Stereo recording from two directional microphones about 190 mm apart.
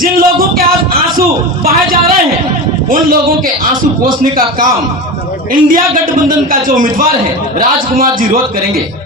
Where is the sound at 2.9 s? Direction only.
50° right (ahead or behind).